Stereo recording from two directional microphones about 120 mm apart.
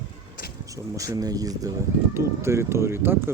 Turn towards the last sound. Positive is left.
turn(degrees=-20)  # may be behind; listen again after turning